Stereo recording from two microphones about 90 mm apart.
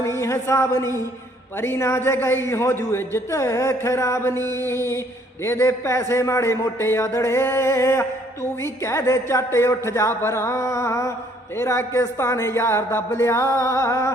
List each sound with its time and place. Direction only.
0.0 s a man's voice: 35° left (ahead or behind)